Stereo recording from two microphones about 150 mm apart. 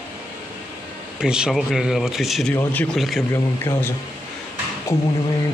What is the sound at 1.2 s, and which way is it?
Speech, 5° right (ahead or behind).